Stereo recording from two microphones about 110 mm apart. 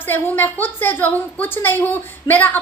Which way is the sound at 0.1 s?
20° left (ahead or behind).